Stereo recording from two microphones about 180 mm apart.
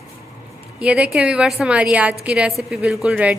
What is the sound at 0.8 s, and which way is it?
A woman's voice, 5° right (ahead or behind).